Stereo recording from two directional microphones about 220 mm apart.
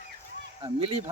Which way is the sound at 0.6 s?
25° right (ahead or behind).